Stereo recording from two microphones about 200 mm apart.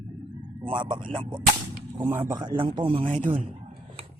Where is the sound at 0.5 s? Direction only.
25° right (ahead or behind).